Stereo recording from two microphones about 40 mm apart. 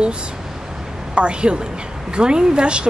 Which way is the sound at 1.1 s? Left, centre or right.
Right.